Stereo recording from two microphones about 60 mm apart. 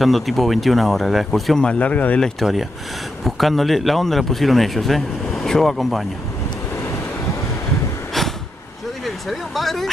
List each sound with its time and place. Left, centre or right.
0.0 s a man's voice: centre
1.6 s speech: centre
2.4 s a man's voice: centre
9.0 s a sound: centre